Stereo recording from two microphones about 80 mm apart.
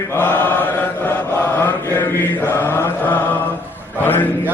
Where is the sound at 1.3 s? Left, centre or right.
Left.